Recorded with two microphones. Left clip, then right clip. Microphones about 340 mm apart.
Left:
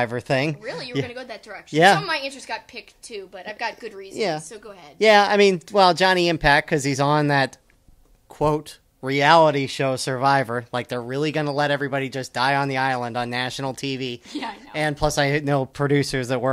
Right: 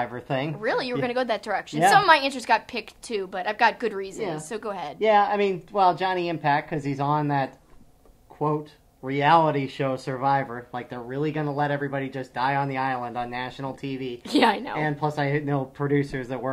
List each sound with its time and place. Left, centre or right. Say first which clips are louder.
0.0 s speech: left 6 dB; left
0.6 s a woman's voice: right 4 dB; right
4.9 s speech: left 5 dB; left
9.0 s speech: left 4 dB; left
14.3 s a woman's voice: right 11 dB; right
14.8 s speech: left 5 dB; left